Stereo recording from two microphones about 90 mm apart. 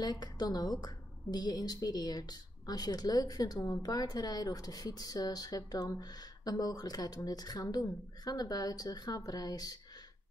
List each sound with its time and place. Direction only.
0.0 s a woman's voice: 50° left (ahead or behind)